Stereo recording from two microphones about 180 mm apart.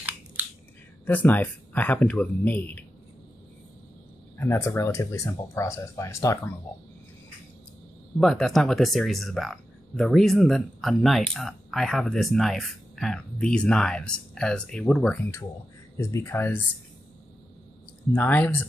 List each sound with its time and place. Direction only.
1.0 s speech: 10° left (ahead or behind)
4.4 s speech: 15° left (ahead or behind)
8.2 s speech: centre (ahead or behind)
18.1 s speech: 10° left (ahead or behind)